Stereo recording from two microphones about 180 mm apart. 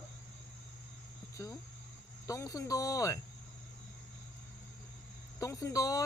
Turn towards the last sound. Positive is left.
turn(degrees=20)  # may be behind; listen again after turning